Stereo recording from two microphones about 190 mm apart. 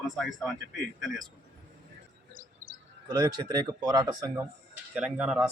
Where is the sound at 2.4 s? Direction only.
50° right (ahead or behind).